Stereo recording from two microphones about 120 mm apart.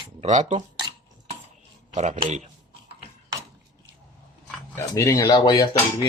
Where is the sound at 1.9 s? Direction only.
75° right (ahead or behind).